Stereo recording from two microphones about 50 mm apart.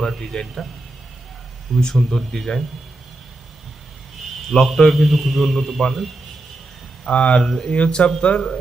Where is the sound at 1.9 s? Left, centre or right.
Centre.